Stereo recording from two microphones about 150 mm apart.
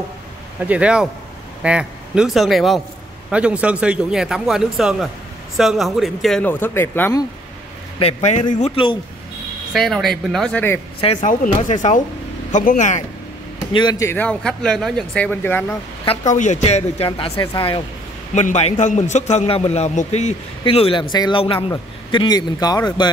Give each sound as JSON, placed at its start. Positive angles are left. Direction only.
{"t": 0.7, "sound": "a man's voice", "side_deg": -10}
{"t": 6.4, "sound": "speech", "side_deg": 15}
{"t": 8.0, "sound": "a man's voice", "side_deg": 45}
{"t": 9.7, "sound": "a man's voice", "side_deg": 0}
{"t": 11.1, "sound": "speech", "side_deg": 55}
{"t": 13.7, "sound": "speech", "side_deg": 30}
{"t": 14.0, "sound": "a man's voice", "side_deg": 10}
{"t": 16.3, "sound": "a man's voice", "side_deg": 50}
{"t": 18.3, "sound": "a man's voice", "side_deg": 50}